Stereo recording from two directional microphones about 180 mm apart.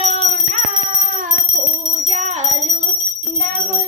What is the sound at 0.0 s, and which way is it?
Music, 40° right (ahead or behind).